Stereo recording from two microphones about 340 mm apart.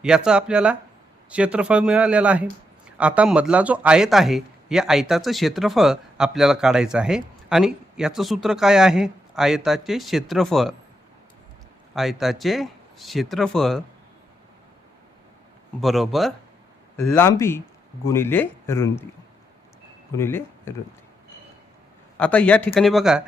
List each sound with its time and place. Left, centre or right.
0.0 s speech: centre
11.9 s speech: centre
15.8 s speech: centre
20.1 s speech: centre
22.2 s speech: centre